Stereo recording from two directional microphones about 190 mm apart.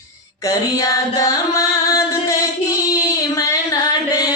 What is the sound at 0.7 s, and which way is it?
Music, 20° left (ahead or behind).